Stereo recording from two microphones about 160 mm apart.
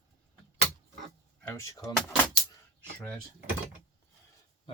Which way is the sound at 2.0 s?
10° left (ahead or behind).